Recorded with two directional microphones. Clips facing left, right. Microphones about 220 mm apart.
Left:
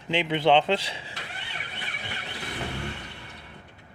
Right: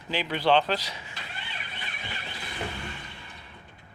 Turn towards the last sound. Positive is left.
turn(degrees=70)  # may be behind; listen again after turning